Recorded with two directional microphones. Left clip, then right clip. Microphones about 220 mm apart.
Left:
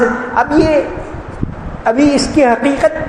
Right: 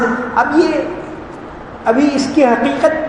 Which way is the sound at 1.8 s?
50° left (ahead or behind).